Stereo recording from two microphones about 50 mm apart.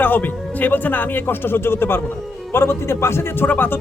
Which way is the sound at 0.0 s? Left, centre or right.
Left.